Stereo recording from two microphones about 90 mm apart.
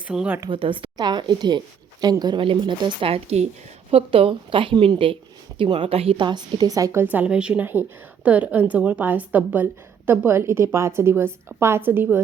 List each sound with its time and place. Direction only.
0.1 s speech: 5° right (ahead or behind)
0.5 s speech: 75° right (ahead or behind)
0.9 s a woman's voice: 50° right (ahead or behind)
2.4 s a woman's voice: 65° right (ahead or behind); by 6.2 s 90° right
6.2 s a woman's voice: 50° right (ahead or behind)
7.0 s a woman's voice: 15° right (ahead or behind)